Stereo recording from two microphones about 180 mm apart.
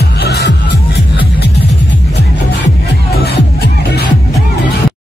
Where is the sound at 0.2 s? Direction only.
65° left (ahead or behind).